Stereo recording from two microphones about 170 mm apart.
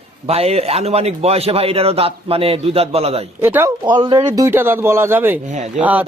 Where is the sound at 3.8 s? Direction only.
30° right (ahead or behind).